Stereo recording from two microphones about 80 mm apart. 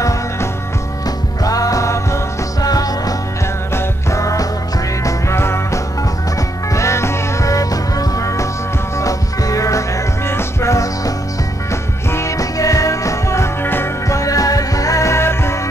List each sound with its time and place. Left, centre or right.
1.4 s music: left
14.0 s music: left